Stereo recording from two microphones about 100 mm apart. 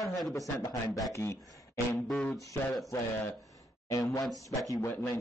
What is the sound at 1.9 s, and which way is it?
Speech, 5° left (ahead or behind).